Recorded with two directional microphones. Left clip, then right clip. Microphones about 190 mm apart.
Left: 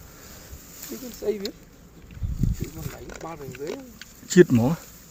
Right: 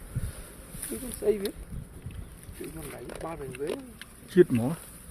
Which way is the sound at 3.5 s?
15° right (ahead or behind).